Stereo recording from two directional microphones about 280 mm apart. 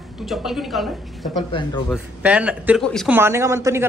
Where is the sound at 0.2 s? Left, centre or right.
Centre.